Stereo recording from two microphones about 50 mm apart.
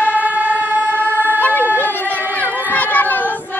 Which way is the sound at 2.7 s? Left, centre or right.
Left.